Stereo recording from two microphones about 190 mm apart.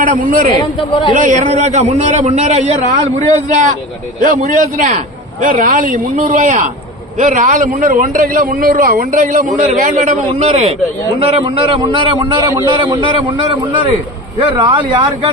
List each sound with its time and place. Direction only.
0.0 s a man's voice: 45° right (ahead or behind); by 15.3 s 25° right (ahead or behind)